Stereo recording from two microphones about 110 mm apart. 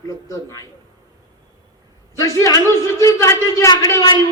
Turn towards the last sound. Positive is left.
turn(degrees=35)  # may be behind; listen again after turning